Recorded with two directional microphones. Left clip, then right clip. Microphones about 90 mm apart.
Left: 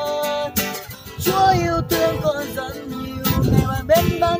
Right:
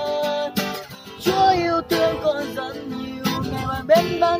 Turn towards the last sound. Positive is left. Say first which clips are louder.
# even
turn(degrees=0)  # may be behind; listen again after turning